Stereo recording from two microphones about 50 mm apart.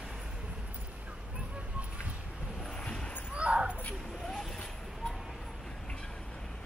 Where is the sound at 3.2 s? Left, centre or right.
Right.